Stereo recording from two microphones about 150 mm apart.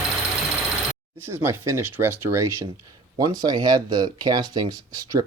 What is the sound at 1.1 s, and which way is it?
Speech, 15° right (ahead or behind).